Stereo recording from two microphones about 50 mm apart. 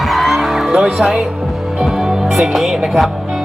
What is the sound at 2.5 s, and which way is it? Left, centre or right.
Speech, centre.